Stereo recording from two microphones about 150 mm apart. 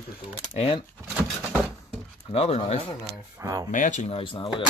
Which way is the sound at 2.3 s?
45° left (ahead or behind).